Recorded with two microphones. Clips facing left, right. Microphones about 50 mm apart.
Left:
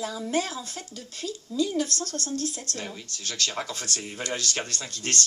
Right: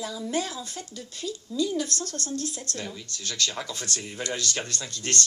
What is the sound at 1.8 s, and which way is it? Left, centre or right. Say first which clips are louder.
Speech: left 1 dB; right.